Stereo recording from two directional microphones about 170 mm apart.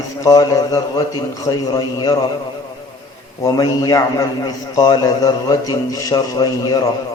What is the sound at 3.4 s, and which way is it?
A man's voice, 20° left (ahead or behind).